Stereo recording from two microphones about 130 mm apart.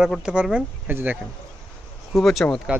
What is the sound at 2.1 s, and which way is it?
Speech, centre (ahead or behind).